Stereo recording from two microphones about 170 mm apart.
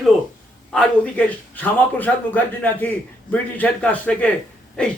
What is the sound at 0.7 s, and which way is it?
A man's voice, 5° left (ahead or behind).